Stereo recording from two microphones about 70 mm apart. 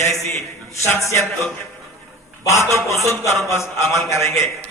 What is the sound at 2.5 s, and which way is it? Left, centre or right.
A man's voice, left.